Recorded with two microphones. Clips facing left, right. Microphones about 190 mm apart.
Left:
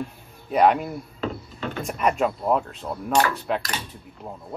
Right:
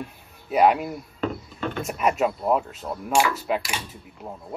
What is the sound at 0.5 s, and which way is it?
Speech, 5° right (ahead or behind).